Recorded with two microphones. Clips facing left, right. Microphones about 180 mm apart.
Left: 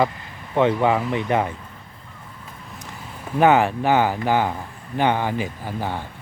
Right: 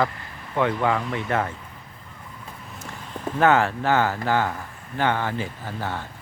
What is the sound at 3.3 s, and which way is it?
Speech, 15° left (ahead or behind).